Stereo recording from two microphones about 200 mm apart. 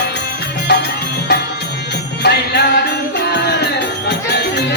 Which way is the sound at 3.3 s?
55° left (ahead or behind).